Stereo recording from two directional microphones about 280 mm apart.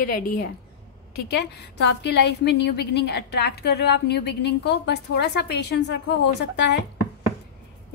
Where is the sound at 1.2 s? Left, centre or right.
Left.